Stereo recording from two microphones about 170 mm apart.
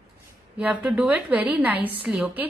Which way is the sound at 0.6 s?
5° right (ahead or behind).